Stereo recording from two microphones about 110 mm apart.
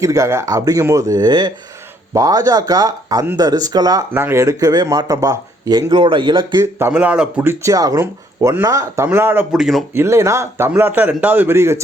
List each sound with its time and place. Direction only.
0.0 s speech: 30° right (ahead or behind)
4.1 s speech: 20° right (ahead or behind); by 6.7 s 45° right (ahead or behind)
6.9 s speech: 10° right (ahead or behind)
7.5 s speech: 30° right (ahead or behind)
9.0 s speech: 20° right (ahead or behind)
9.5 s speech: centre (ahead or behind)
9.9 s speech: 25° right (ahead or behind)